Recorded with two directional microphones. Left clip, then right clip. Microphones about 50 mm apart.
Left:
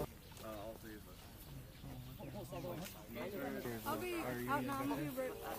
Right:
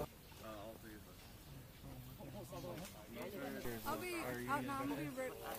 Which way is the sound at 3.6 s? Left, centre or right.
Right.